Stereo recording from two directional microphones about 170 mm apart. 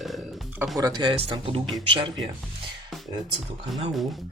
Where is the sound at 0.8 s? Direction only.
25° right (ahead or behind).